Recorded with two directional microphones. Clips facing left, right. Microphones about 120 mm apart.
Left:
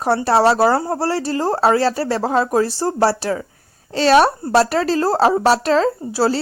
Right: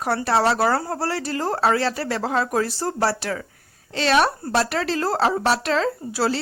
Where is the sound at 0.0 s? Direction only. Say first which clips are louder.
Left 5 dB; 35° left (ahead or behind).